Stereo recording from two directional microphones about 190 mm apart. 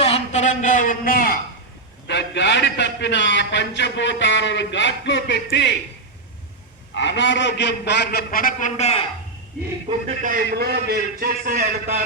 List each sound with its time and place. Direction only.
0.0 s speech: 35° left (ahead or behind)
2.0 s a man's voice: 65° left (ahead or behind)
6.9 s a man's voice: 70° left (ahead or behind); by 9.0 s 35° left (ahead or behind)
9.9 s a man's voice: 25° right (ahead or behind)
10.5 s a man's voice: 55° right (ahead or behind)